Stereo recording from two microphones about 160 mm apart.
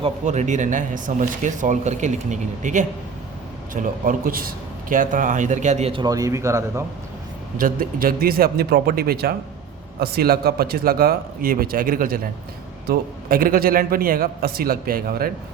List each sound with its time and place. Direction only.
0.3 s speech: 50° right (ahead or behind)
3.8 s a man's voice: 60° right (ahead or behind)
5.9 s speech: 25° right (ahead or behind)
7.6 s a man's voice: 60° right (ahead or behind)